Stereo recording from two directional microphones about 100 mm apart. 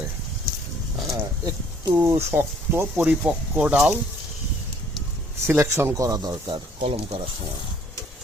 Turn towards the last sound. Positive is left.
turn(degrees=-70)  # may be behind; listen again after turning